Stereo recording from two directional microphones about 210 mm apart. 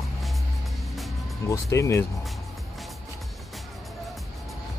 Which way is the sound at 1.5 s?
15° left (ahead or behind).